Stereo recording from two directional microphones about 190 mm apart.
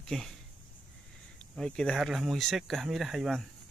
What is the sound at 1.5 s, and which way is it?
Speech, 5° left (ahead or behind).